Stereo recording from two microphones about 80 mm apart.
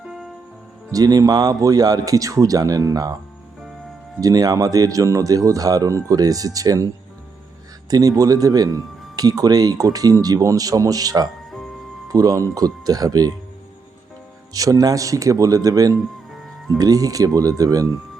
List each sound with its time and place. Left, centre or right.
0.9 s speech: right
4.2 s speech: right
7.9 s speech: right
14.5 s speech: right